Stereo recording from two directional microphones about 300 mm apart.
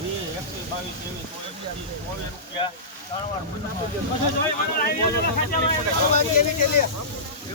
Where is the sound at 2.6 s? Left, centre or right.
Centre.